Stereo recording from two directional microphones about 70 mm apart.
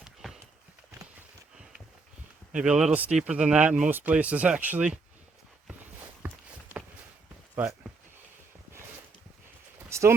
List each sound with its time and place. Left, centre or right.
0.0 s clip-clop: centre
2.5 s speech: centre
2.9 s speech: right
6.2 s walk: right
9.9 s a sound: right